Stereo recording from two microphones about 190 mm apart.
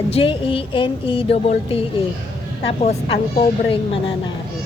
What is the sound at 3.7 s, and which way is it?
Speech, 30° left (ahead or behind).